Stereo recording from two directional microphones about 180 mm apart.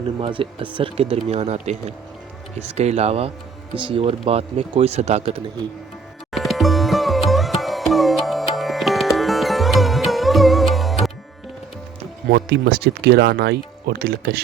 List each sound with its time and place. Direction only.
0.2 s speech: 30° right (ahead or behind)
6.3 s sitar: centre (ahead or behind)
12.3 s speech: 65° right (ahead or behind)